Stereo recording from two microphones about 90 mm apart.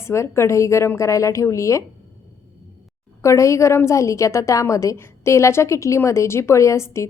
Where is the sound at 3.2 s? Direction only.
35° left (ahead or behind).